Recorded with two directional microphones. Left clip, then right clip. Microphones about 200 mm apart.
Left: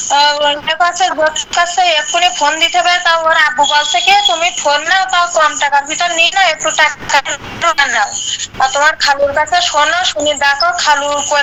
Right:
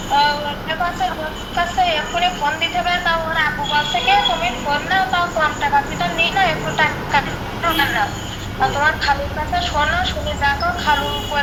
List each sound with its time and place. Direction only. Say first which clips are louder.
0.1 s a woman's voice: left 6 dB; 45° left (ahead or behind)